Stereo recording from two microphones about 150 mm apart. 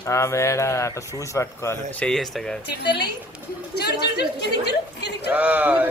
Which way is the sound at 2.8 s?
90° left.